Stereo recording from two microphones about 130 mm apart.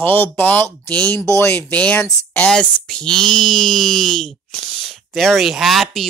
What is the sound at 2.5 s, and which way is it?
Speech, 5° left (ahead or behind).